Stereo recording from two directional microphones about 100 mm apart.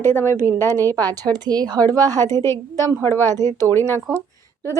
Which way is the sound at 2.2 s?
30° left (ahead or behind).